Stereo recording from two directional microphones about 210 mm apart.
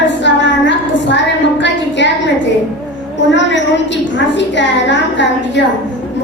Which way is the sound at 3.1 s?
60° left (ahead or behind).